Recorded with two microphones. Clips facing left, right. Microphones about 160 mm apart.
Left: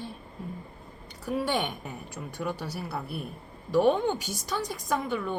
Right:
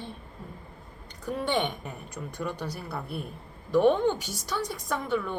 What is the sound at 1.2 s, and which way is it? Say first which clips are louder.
A woman's voice: even; 5° left (ahead or behind).